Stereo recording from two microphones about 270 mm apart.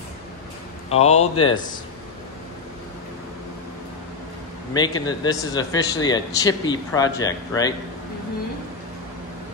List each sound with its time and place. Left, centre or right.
0.8 s speech: left
4.7 s speech: centre